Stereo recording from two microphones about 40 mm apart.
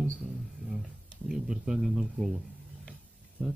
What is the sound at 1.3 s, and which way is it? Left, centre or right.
Speech, centre.